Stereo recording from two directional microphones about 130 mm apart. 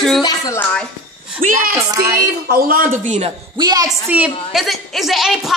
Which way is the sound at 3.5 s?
30° right (ahead or behind).